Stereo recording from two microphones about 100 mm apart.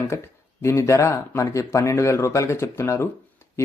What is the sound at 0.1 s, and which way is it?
A man's voice, 30° left (ahead or behind).